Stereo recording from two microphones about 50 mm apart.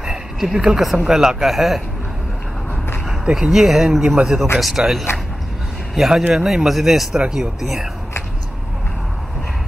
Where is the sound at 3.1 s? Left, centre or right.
Centre.